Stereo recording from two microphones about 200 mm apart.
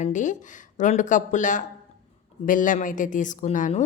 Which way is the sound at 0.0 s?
40° left (ahead or behind).